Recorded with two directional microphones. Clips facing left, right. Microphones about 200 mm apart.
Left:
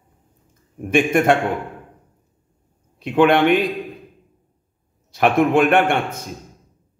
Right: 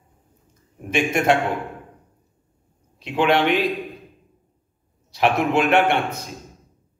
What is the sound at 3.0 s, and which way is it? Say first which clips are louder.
Speech: left 4 dB; 55° left (ahead or behind).